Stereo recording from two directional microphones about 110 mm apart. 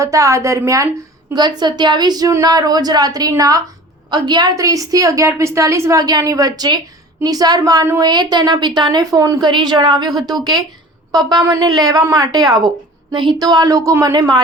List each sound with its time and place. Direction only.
0.0 s a woman's voice: 30° right (ahead or behind)
1.3 s a woman's voice: 40° right (ahead or behind)